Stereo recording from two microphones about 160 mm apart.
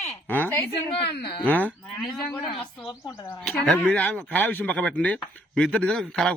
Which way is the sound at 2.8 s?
30° left (ahead or behind).